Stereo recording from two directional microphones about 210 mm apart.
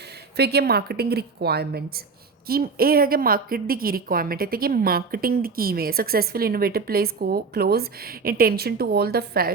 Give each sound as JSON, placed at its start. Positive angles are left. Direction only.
{"t": 0.3, "sound": "speech", "side_deg": -50}